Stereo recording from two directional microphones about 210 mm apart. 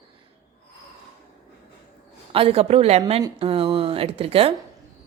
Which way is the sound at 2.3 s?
30° right (ahead or behind).